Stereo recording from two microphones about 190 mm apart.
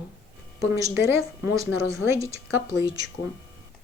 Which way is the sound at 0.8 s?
15° right (ahead or behind).